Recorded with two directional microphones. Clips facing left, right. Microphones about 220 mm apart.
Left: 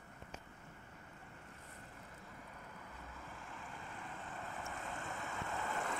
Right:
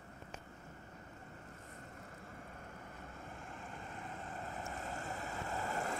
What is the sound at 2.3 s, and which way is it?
Vehicle, 45° right (ahead or behind).